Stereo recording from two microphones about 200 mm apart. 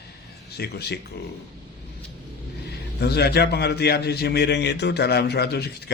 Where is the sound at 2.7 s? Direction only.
55° left (ahead or behind).